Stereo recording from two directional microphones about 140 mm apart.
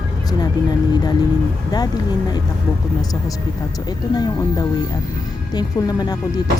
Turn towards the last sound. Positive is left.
turn(degrees=30)  # may be behind; listen again after turning